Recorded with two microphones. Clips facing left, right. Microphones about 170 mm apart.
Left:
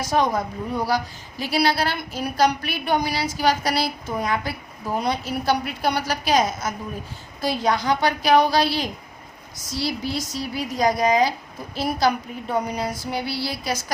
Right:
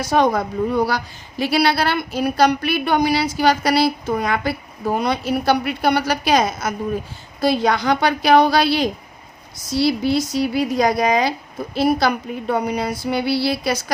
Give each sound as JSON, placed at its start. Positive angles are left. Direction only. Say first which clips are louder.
{"t": 0.0, "sound": "a woman's voice", "louder": "right 4 dB", "side_deg": -70}